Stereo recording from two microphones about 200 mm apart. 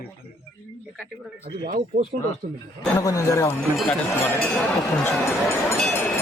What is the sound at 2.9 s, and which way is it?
Train, 15° left (ahead or behind).